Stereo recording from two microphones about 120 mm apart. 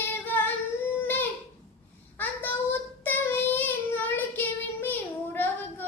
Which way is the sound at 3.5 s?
15° left (ahead or behind).